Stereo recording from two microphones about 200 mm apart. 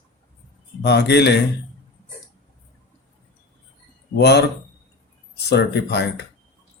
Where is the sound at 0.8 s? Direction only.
55° left (ahead or behind).